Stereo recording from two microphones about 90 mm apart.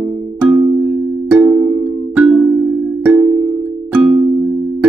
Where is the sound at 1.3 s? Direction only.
10° right (ahead or behind).